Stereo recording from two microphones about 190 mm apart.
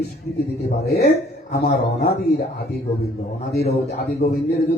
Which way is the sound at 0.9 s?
55° left (ahead or behind).